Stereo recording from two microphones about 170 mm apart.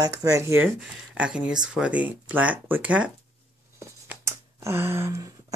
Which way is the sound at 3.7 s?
15° right (ahead or behind).